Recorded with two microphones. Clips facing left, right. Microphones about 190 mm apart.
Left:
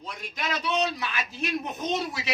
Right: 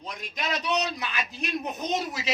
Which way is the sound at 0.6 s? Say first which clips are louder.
Left 3 dB; 20° right (ahead or behind).